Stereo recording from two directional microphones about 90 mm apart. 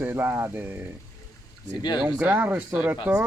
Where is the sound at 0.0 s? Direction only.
25° right (ahead or behind).